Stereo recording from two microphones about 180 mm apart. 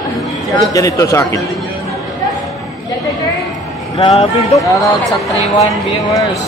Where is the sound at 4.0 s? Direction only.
35° left (ahead or behind).